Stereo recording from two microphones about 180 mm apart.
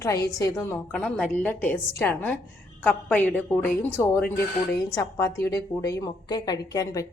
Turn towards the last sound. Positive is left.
turn(degrees=20)  # may be behind; listen again after turning